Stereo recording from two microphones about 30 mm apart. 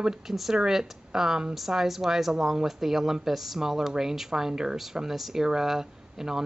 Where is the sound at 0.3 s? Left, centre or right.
Centre.